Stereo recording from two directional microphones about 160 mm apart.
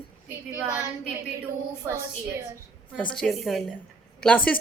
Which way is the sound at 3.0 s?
5° left (ahead or behind).